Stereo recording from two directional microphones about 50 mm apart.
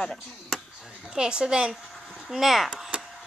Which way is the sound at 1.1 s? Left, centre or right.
Centre.